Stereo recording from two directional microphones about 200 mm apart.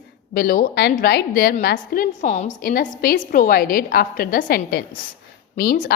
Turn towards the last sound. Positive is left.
turn(degrees=45)  # may be behind; listen again after turning